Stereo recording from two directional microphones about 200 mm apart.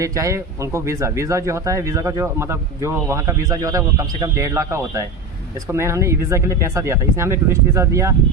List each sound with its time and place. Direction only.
0.0 s speech: 15° right (ahead or behind)